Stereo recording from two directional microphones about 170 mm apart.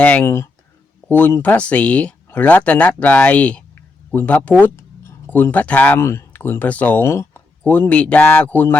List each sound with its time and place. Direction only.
0.0 s speech: 10° left (ahead or behind)